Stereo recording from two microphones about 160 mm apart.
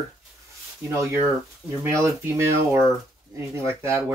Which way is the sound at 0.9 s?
20° right (ahead or behind).